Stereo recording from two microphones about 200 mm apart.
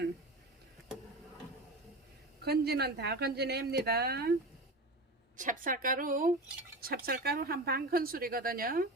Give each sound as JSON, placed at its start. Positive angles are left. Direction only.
{"t": 2.4, "sound": "speech", "side_deg": -55}
{"t": 5.4, "sound": "speech", "side_deg": -40}